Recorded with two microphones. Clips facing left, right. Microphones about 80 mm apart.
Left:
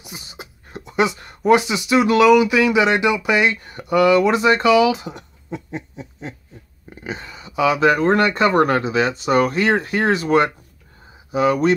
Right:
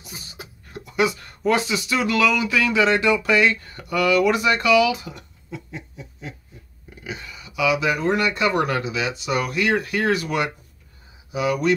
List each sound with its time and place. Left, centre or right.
0.0 s speech: left